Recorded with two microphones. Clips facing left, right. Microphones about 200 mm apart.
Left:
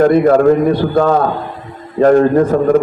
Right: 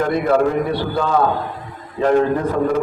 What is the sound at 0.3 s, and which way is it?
A man's voice, 50° left (ahead or behind).